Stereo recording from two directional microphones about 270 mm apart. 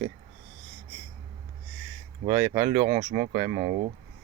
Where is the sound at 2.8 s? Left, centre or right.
Centre.